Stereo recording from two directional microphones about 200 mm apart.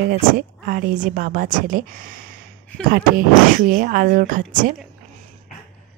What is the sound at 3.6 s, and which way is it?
Speech, 50° right (ahead or behind).